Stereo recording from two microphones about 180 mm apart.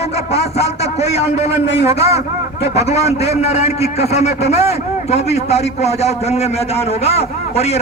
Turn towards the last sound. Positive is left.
turn(degrees=35)  # may be behind; listen again after turning